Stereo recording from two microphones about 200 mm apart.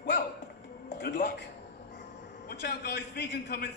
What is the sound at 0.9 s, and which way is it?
Speech, 45° left (ahead or behind).